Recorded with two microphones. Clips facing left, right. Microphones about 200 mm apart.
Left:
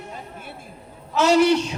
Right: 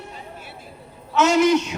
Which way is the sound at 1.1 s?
35° left (ahead or behind).